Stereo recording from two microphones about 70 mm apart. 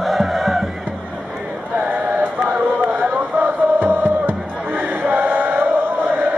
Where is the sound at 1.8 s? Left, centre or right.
Right.